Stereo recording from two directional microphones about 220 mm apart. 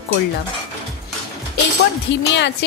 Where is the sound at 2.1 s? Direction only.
55° left (ahead or behind).